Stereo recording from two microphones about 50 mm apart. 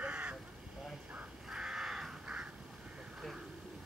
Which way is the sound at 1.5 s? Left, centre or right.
Centre.